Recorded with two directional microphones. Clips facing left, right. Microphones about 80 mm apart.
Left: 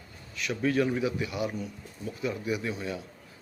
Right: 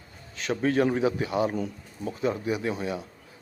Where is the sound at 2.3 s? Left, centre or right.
Right.